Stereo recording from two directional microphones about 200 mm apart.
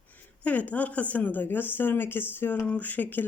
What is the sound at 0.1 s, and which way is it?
A woman's voice, 10° left (ahead or behind).